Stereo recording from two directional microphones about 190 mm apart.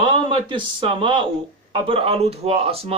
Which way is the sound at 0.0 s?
25° right (ahead or behind).